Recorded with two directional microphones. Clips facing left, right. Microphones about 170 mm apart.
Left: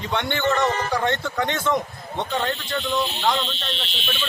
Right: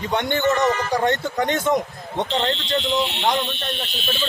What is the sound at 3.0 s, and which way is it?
Speech, 70° right (ahead or behind).